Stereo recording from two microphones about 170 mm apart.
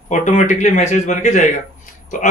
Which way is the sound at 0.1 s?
45° left (ahead or behind).